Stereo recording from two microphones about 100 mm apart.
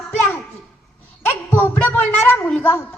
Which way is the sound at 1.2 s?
25° left (ahead or behind).